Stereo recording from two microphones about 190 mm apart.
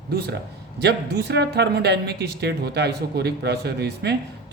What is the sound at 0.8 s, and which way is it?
Speech, 60° right (ahead or behind).